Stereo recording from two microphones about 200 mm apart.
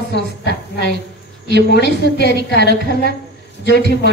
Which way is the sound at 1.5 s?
55° left (ahead or behind).